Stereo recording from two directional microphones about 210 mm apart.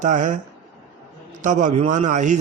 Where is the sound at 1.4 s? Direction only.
35° right (ahead or behind).